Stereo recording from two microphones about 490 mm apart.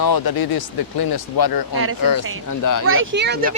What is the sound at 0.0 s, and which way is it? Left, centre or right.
Speech, left.